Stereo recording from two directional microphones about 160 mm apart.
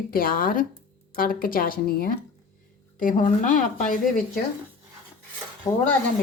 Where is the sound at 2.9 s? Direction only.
55° left (ahead or behind).